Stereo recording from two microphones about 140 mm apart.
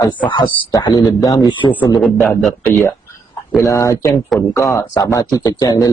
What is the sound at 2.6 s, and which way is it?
Speech, 20° left (ahead or behind).